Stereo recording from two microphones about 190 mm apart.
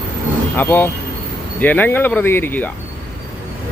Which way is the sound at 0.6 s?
10° left (ahead or behind).